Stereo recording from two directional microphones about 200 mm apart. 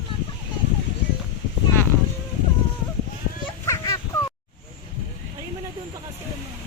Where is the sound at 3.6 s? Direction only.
15° left (ahead or behind).